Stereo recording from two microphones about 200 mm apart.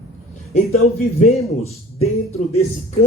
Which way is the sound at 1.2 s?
30° left (ahead or behind).